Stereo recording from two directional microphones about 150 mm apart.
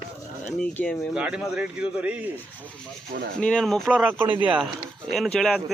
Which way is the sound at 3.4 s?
5° left (ahead or behind).